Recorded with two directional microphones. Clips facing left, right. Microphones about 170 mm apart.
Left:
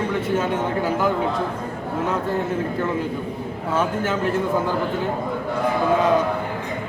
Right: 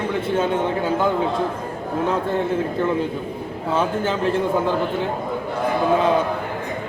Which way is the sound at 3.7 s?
30° right (ahead or behind).